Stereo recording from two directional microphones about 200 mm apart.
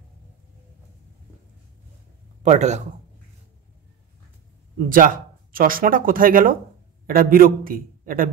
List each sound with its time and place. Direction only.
2.4 s a man's voice: 35° right (ahead or behind)
4.8 s speech: 45° right (ahead or behind)